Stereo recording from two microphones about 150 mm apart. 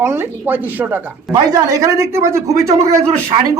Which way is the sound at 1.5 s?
20° right (ahead or behind).